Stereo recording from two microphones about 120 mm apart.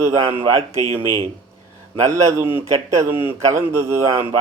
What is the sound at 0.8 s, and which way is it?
Speech, 50° right (ahead or behind).